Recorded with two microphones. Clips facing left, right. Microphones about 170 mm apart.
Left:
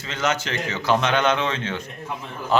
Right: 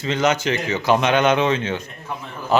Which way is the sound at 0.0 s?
15° right (ahead or behind).